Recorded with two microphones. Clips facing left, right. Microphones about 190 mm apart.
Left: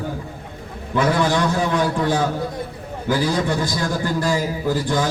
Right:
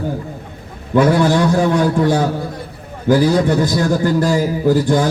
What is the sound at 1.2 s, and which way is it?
A man's voice, 45° right (ahead or behind).